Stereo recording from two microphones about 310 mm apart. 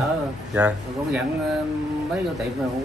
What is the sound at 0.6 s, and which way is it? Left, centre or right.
Speech, centre.